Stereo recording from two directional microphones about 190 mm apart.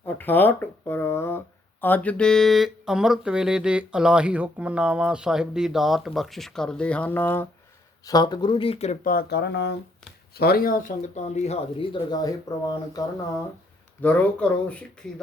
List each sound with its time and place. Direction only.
0.0 s a sound: 10° left (ahead or behind)
1.8 s speech: 10° left (ahead or behind)
8.0 s speech: 20° left (ahead or behind)
9.0 s speech: 55° left (ahead or behind); by 11.9 s 35° left (ahead or behind)
12.5 s speech: 20° left (ahead or behind)
14.0 s speech: 5° left (ahead or behind)